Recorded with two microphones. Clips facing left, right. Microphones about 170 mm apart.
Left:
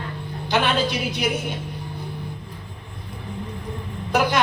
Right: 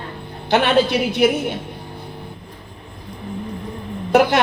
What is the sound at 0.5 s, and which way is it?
Speech, 60° right (ahead or behind).